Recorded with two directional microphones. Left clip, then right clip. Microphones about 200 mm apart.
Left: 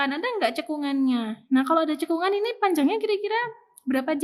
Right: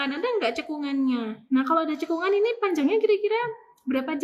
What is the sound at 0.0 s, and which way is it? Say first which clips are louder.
A woman's voice: left 1 dB; 60° left (ahead or behind).